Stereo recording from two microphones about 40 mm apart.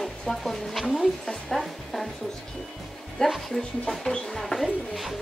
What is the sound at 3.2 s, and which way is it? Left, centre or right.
Speech, left.